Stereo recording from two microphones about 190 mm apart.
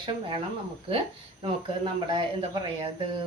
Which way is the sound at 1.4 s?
25° right (ahead or behind).